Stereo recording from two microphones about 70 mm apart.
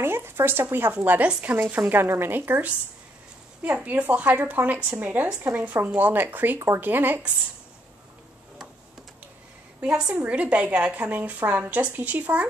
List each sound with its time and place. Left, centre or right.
0.0 s speech: right
9.8 s a woman's voice: centre